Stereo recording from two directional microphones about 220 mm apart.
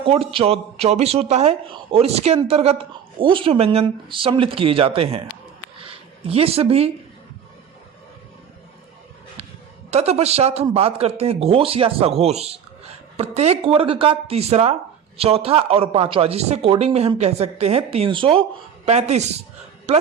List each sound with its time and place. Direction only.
0.0 s speech: 25° right (ahead or behind)
9.9 s speech: 30° right (ahead or behind)